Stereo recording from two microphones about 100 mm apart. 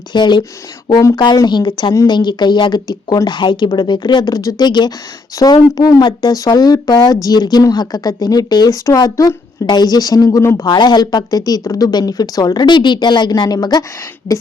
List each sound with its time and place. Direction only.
0.1 s speech: 50° left (ahead or behind); by 10.7 s 30° left (ahead or behind)
10.7 s speech: 45° left (ahead or behind)